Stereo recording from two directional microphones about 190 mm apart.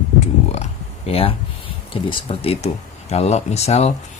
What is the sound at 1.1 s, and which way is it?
Speech, 30° left (ahead or behind).